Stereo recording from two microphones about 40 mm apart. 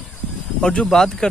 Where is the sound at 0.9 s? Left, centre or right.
Centre.